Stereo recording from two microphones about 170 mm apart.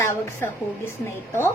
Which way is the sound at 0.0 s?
15° left (ahead or behind).